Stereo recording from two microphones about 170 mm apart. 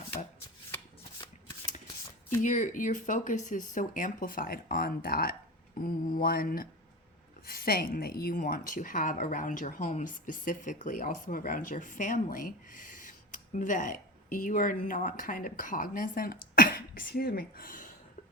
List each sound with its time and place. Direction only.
2.4 s speech: 50° left (ahead or behind)
5.8 s mantra: 60° left (ahead or behind)
7.4 s speech: 60° left (ahead or behind)